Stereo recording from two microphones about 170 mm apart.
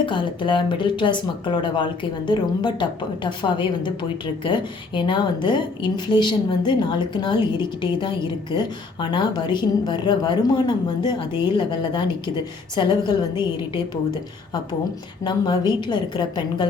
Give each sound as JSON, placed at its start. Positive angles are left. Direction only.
{"t": 0.0, "sound": "a woman's voice", "side_deg": 30}
{"t": 14.1, "sound": "a woman's voice", "side_deg": 25}